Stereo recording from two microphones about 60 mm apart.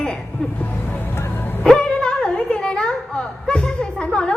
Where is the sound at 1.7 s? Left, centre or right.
Centre.